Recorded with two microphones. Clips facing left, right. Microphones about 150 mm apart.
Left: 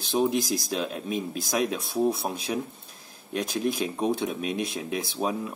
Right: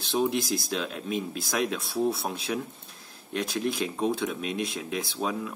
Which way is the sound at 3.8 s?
20° left (ahead or behind).